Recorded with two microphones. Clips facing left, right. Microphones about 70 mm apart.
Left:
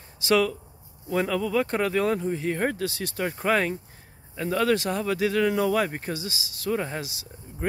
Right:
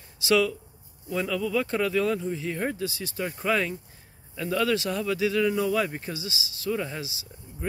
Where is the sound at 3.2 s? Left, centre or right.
Left.